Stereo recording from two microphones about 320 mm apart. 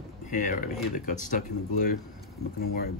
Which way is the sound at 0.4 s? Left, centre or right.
Left.